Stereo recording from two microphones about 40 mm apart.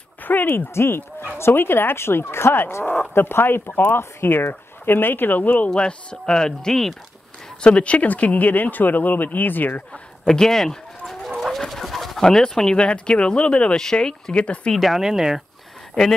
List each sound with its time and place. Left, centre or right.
0.2 s a sound: left
0.5 s speech: left
1.4 s speech: left
5.7 s speech: left
7.6 s speech: left
10.2 s speech: centre
11.2 s bird: centre
12.2 s speech: centre
13.7 s speech: centre
14.8 s speech: centre
15.9 s speech: centre